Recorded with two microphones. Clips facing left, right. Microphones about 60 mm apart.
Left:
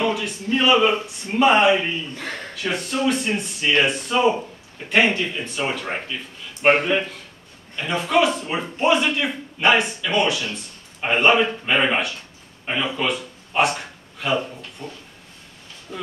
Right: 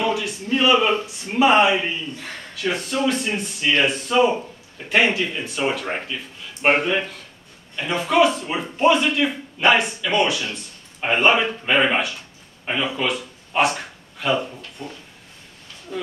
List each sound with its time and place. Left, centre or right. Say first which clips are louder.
0.0 s a sound: even; centre
0.6 s a man's voice: even; centre
14.8 s speech: right 1 dB; right
15.9 s speech: right 3 dB; centre